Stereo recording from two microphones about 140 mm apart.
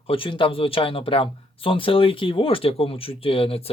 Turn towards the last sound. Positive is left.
turn(degrees=40)  # may be behind; listen again after turning